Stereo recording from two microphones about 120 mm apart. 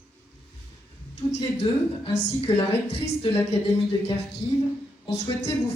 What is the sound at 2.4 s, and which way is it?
Speech, 60° left (ahead or behind).